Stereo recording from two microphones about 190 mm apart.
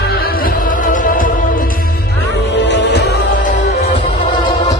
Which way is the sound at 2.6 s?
65° left (ahead or behind).